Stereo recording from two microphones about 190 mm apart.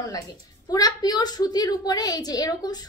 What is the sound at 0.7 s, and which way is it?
A woman's voice, 20° left (ahead or behind).